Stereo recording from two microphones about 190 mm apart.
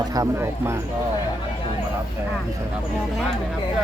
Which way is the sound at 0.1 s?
15° right (ahead or behind).